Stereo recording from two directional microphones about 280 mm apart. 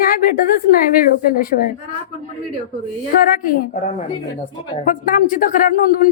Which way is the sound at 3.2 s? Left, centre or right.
Left.